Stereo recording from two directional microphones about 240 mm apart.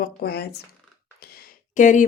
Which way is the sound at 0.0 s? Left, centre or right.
Left.